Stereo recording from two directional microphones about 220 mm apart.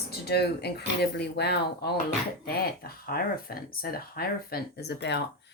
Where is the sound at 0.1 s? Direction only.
45° left (ahead or behind).